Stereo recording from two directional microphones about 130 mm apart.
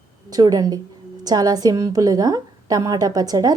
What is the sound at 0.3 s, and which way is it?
A woman's voice, 30° right (ahead or behind).